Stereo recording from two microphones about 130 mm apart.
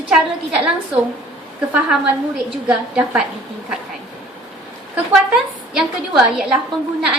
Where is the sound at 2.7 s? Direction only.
10° right (ahead or behind).